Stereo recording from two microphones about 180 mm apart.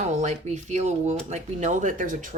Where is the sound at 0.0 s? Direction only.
40° right (ahead or behind).